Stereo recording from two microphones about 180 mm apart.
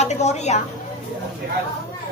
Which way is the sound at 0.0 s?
40° left (ahead or behind).